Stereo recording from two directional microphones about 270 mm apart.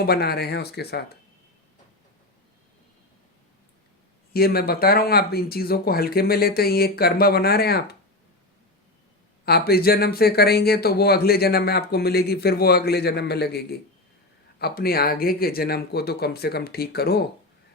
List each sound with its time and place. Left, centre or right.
0.0 s speech: left
4.4 s speech: left
9.5 s speech: left